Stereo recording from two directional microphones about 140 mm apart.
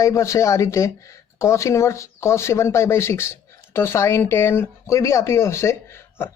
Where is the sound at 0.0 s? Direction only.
20° left (ahead or behind).